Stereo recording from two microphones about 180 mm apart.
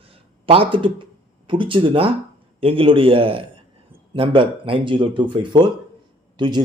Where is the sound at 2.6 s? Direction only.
30° right (ahead or behind).